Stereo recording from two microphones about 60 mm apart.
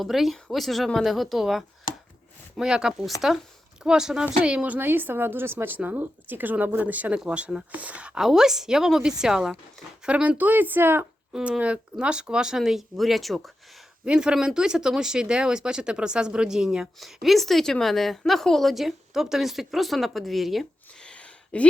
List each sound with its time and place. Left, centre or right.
0.0 s a woman's voice: centre; by 4.8 s right
4.8 s speech: right
8.2 s speech: centre; by 11.0 s right
11.3 s speech: centre
14.0 s a woman's voice: centre
21.0 s a sound: centre